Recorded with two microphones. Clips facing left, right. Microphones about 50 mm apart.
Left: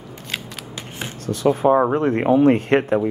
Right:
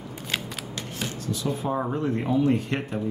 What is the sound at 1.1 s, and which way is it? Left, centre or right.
Speech, left.